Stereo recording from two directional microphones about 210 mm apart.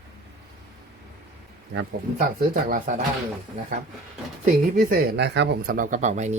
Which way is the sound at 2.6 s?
40° right (ahead or behind).